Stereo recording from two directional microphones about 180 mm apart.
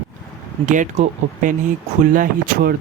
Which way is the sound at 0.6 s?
45° right (ahead or behind).